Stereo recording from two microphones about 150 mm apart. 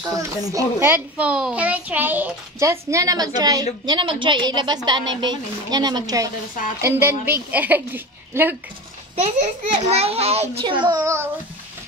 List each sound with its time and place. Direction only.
0.5 s a child's voice: 20° right (ahead or behind)
9.2 s a child's voice: 45° right (ahead or behind); by 11.2 s 20° right (ahead or behind)